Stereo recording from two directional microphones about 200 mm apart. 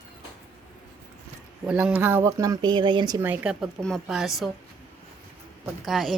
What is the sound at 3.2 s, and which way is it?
Speech, 5° right (ahead or behind).